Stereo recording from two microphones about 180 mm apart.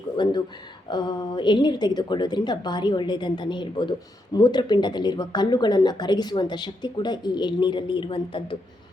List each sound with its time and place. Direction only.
0.2 s speech: 25° left (ahead or behind)